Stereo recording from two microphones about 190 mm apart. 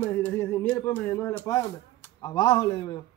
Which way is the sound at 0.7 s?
10° left (ahead or behind).